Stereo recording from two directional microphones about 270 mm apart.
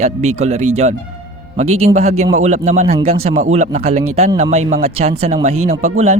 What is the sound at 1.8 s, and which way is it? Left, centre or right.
Speech, right.